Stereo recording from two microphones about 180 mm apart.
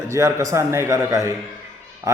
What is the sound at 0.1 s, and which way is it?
A man's voice, 15° right (ahead or behind).